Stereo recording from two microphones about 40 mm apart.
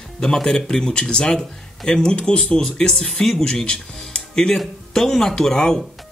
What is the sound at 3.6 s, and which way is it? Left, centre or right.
Speech, left.